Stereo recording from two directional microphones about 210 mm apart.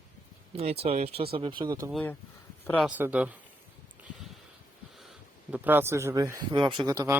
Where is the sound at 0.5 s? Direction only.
30° right (ahead or behind).